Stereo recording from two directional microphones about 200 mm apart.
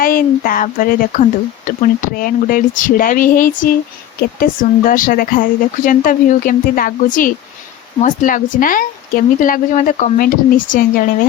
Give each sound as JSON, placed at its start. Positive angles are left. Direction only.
{"t": 0.0, "sound": "speech", "side_deg": 45}